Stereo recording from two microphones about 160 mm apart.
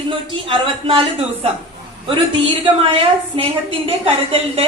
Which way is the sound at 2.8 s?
35° right (ahead or behind).